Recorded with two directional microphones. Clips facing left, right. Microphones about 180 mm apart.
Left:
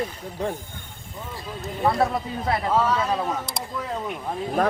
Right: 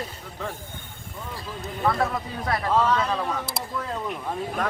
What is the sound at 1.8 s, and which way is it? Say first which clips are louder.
Speech: left 3 dB; 20° left (ahead or behind).